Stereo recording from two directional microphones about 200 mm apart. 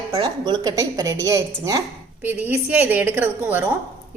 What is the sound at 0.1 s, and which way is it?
A woman's voice, 20° right (ahead or behind).